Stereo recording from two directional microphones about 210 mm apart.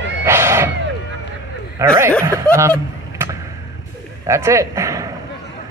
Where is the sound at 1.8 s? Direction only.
15° right (ahead or behind).